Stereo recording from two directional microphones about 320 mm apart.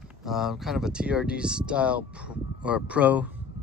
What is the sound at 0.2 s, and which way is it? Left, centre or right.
Speech, centre.